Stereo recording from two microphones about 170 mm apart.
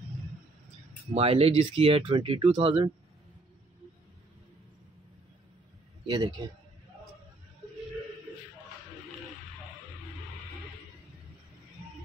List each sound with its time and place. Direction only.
1.1 s speech: 35° right (ahead or behind)
6.0 s a man's voice: 25° right (ahead or behind)